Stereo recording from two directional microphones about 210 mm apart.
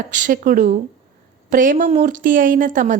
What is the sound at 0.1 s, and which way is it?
A woman's voice, 40° right (ahead or behind).